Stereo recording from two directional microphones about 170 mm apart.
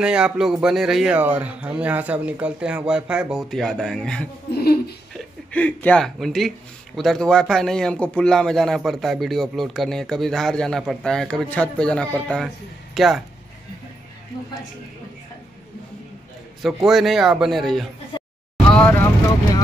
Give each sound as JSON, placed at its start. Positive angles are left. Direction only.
{"t": 0.0, "sound": "a man's voice", "side_deg": -5}
{"t": 4.5, "sound": "a sound", "side_deg": 65}
{"t": 5.1, "sound": "a man's voice", "side_deg": 10}
{"t": 16.6, "sound": "a man's voice", "side_deg": 0}